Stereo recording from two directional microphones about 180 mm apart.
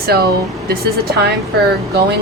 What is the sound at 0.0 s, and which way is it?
Speech, 60° right (ahead or behind).